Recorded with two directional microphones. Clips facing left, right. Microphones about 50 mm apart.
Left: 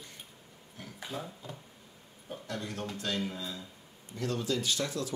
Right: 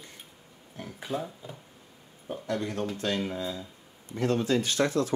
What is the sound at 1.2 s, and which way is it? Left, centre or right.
Speech, centre.